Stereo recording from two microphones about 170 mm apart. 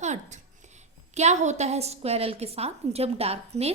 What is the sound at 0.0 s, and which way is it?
A woman's voice, 45° right (ahead or behind).